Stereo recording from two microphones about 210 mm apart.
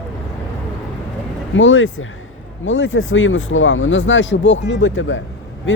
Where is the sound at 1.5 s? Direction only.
65° left (ahead or behind).